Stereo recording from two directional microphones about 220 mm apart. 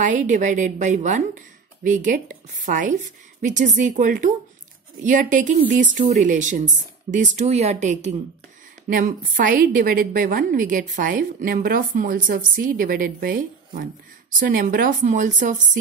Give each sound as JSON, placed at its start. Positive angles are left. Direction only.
{"t": 0.0, "sound": "a woman's voice", "side_deg": -35}